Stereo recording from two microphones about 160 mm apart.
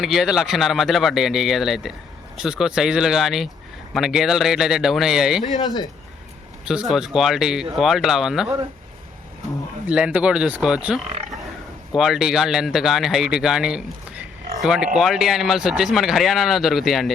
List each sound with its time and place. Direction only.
0.0 s speech: centre (ahead or behind)
5.5 s speech: 25° left (ahead or behind)
6.7 s speech: 5° right (ahead or behind)
9.8 s speech: 10° right (ahead or behind)